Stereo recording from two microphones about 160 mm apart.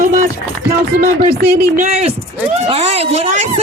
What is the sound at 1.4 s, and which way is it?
Speech, 75° right (ahead or behind).